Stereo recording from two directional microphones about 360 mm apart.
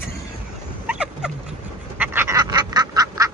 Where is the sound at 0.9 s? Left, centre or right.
Centre.